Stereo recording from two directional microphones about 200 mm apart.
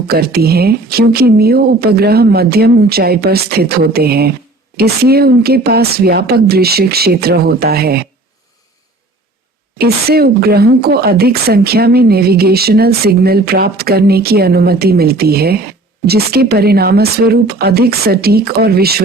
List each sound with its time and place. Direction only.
0.1 s a woman's voice: 50° right (ahead or behind)
9.7 s a woman's voice: 50° right (ahead or behind)